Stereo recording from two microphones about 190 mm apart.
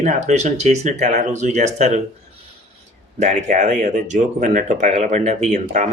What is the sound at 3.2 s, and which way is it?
Speech, 40° right (ahead or behind).